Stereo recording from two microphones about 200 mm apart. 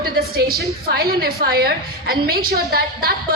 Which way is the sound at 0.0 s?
50° right (ahead or behind).